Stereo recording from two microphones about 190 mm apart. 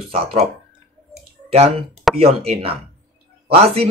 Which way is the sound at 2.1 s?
30° right (ahead or behind).